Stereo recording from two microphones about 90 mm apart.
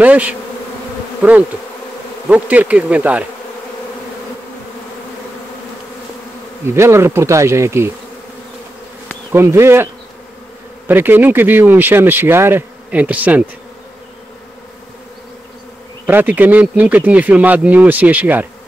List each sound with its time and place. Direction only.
0.0 s bee: 15° right (ahead or behind)
2.2 s bee: 15° right (ahead or behind)
6.7 s speech: 30° right (ahead or behind)
9.3 s speech: 30° right (ahead or behind)
10.9 s speech: 25° right (ahead or behind)
12.9 s bee: 15° right (ahead or behind)
16.1 s speech: 20° right (ahead or behind)